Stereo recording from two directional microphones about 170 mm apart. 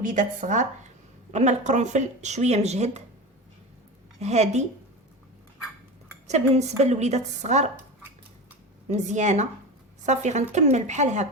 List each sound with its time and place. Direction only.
0.0 s speech: 50° right (ahead or behind)
4.2 s speech: 40° right (ahead or behind)
6.2 s speech: 40° right (ahead or behind)
8.9 s speech: 45° right (ahead or behind)